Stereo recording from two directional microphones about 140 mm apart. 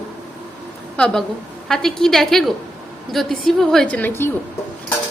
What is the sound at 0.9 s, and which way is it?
A woman's voice, 5° left (ahead or behind).